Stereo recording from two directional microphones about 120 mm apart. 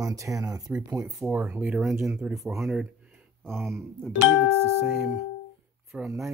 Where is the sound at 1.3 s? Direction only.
10° right (ahead or behind).